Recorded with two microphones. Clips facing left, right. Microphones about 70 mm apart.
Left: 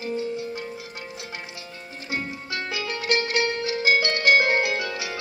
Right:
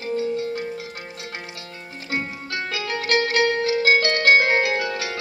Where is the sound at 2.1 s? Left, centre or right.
Right.